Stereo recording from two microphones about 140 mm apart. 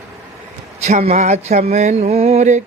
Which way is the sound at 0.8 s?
50° right (ahead or behind).